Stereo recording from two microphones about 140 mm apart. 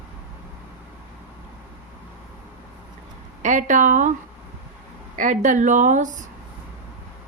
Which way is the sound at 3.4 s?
65° right (ahead or behind).